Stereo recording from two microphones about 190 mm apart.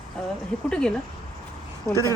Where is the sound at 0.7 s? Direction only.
5° left (ahead or behind).